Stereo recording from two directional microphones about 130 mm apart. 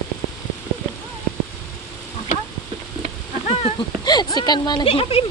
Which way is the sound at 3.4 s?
50° left (ahead or behind).